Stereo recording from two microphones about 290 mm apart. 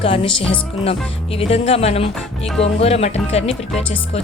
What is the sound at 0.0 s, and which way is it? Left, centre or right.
Speech, centre.